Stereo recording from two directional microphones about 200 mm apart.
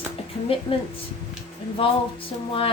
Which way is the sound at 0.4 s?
30° left (ahead or behind).